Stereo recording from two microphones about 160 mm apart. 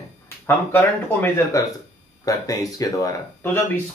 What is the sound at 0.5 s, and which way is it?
Speech, 15° left (ahead or behind).